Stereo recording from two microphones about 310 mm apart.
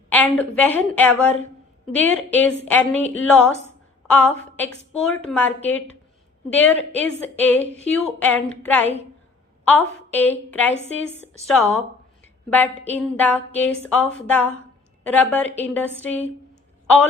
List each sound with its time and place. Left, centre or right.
0.1 s a woman's voice: centre
10.8 s a woman's voice: left
11.4 s a woman's voice: centre